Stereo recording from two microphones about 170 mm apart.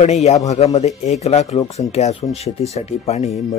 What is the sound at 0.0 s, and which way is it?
Speech, 40° left (ahead or behind).